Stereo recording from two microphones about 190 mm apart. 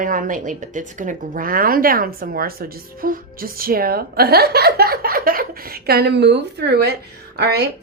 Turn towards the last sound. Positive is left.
turn(degrees=-60)  # may be behind; listen again after turning